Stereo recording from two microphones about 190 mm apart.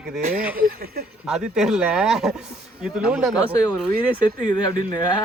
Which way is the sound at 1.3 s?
5° right (ahead or behind).